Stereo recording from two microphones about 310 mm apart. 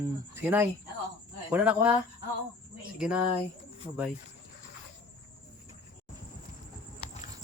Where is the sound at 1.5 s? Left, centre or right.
Centre.